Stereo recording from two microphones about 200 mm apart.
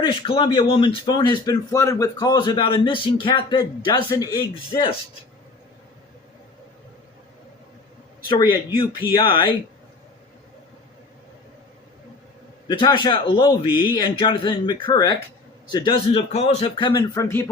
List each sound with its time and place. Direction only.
0.0 s speech: 25° left (ahead or behind)
8.3 s speech: 20° left (ahead or behind)
12.6 s speech: 25° left (ahead or behind)